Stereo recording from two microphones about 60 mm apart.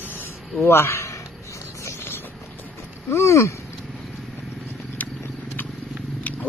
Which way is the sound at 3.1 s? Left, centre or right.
Left.